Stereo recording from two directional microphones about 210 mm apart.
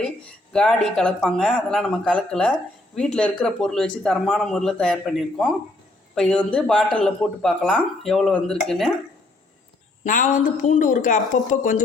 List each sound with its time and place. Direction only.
0.5 s speech: 5° left (ahead or behind)
10.0 s a woman's voice: 35° left (ahead or behind)